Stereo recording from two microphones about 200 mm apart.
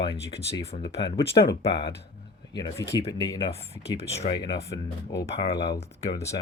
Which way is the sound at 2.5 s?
20° left (ahead or behind).